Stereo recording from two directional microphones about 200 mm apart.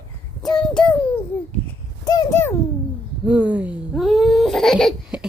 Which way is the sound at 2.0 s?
20° left (ahead or behind).